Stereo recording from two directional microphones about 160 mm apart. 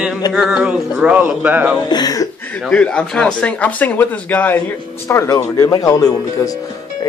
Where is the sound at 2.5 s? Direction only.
5° left (ahead or behind).